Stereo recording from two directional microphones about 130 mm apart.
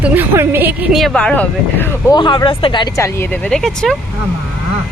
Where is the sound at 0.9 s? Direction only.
5° left (ahead or behind).